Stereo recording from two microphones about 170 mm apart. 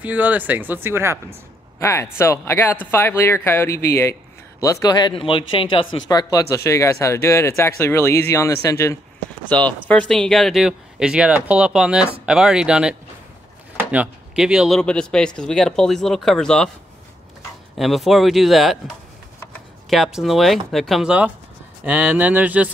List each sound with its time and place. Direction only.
0.0 s speech: 10° right (ahead or behind)
1.8 s speech: 15° left (ahead or behind); by 12.9 s 5° right (ahead or behind)
13.9 s speech: 5° right (ahead or behind)
17.7 s speech: centre (ahead or behind)